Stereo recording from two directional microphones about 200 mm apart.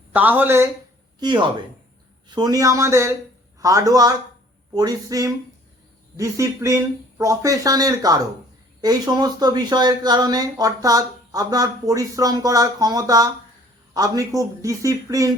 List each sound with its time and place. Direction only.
0.1 s speech: 10° right (ahead or behind)
1.2 s speech: 20° right (ahead or behind)